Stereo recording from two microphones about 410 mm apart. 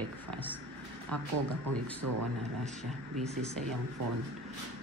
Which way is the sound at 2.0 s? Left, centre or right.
Right.